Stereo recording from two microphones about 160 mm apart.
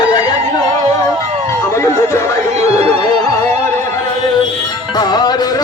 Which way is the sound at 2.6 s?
40° right (ahead or behind).